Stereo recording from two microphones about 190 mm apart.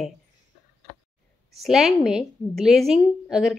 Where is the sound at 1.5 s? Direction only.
Centre (ahead or behind).